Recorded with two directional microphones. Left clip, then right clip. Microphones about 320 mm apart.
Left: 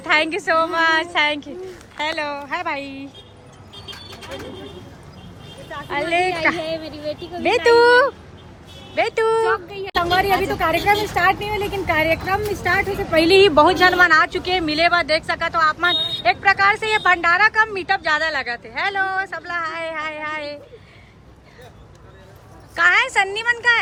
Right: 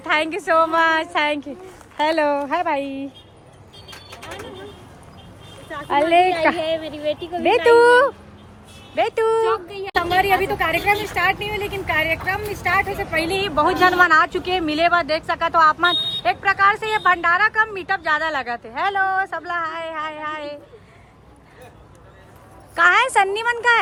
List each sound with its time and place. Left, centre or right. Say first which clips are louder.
0.0 s speech: left 2 dB; centre
5.9 s a woman's voice: right 4 dB; centre
13.1 s speech: left 10 dB; left
13.6 s speech: left 2 dB; centre
22.7 s a woman's voice: right 1 dB; centre